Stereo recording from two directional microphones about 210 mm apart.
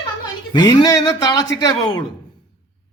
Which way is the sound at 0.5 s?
20° left (ahead or behind).